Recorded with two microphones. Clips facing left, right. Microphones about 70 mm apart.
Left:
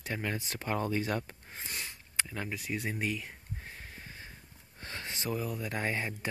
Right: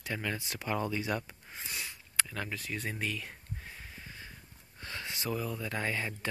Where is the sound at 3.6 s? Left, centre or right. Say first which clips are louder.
Left 1 dB; left.